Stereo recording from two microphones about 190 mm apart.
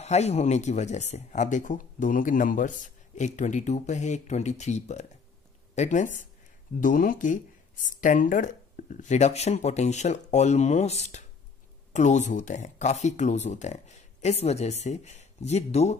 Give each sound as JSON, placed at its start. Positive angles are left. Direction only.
{"t": 0.0, "sound": "speech", "side_deg": 35}